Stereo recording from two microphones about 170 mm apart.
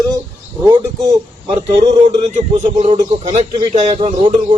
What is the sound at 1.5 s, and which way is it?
A man's voice, 35° right (ahead or behind).